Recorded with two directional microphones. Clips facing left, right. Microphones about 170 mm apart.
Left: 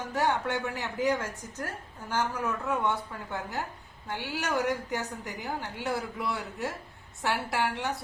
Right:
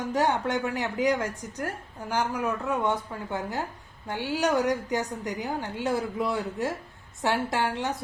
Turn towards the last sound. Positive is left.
turn(degrees=-20)  # may be behind; listen again after turning